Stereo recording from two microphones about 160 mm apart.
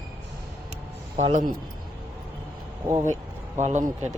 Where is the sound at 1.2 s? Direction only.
40° right (ahead or behind).